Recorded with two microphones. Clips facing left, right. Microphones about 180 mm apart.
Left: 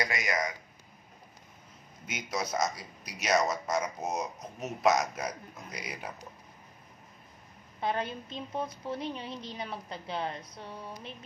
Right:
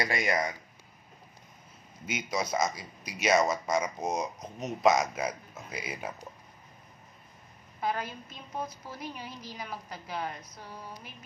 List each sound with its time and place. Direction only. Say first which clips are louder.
0.1 s speech: right 4 dB; 30° right (ahead or behind)
2.0 s a man's voice: right 3 dB; centre (ahead or behind)
7.8 s a woman's voice: left 1 dB; 25° left (ahead or behind)